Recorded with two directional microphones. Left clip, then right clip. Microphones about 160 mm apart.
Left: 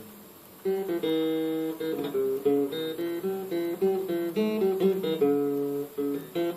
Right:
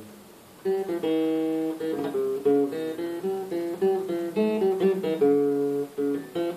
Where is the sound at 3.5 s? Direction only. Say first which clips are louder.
Right 1 dB; 15° left (ahead or behind).